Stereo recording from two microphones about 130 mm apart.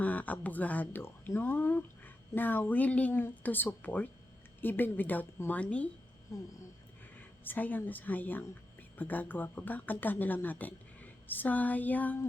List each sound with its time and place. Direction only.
0.0 s speech: 10° left (ahead or behind)
6.3 s speech: 25° left (ahead or behind)
7.2 s speech: 15° left (ahead or behind)